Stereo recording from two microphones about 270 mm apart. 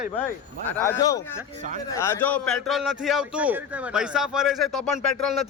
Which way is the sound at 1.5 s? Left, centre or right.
Right.